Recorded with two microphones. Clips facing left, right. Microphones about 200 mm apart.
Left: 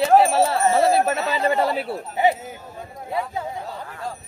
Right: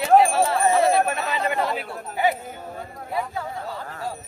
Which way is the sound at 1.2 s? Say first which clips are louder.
Left 4 dB; 40° left (ahead or behind).